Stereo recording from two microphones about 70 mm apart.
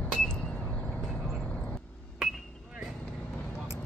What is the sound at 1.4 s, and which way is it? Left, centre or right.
Vehicle, centre.